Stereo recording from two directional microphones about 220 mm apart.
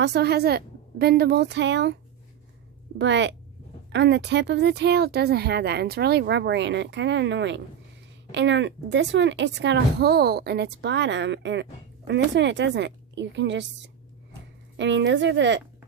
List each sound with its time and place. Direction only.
0.0 s speech: 50° right (ahead or behind)
3.0 s speech: 55° right (ahead or behind)